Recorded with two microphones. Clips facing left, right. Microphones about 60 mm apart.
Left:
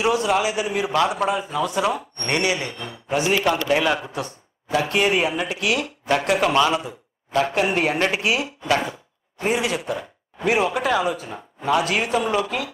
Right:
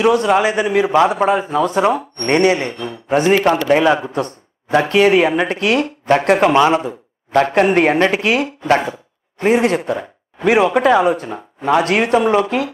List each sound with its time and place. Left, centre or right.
0.0 s speech: right
0.9 s a man's voice: right
1.3 s speech: right